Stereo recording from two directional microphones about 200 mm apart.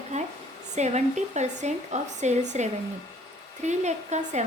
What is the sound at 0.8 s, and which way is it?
A woman's voice, 35° right (ahead or behind).